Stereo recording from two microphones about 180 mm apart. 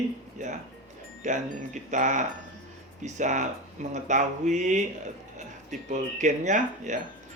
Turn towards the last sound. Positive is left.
turn(degrees=-40)  # may be behind; listen again after turning